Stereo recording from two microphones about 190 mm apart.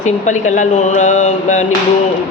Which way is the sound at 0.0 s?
40° left (ahead or behind).